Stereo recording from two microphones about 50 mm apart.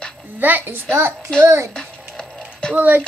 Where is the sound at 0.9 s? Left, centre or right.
Right.